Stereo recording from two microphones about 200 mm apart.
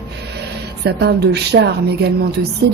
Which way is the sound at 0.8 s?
55° right (ahead or behind).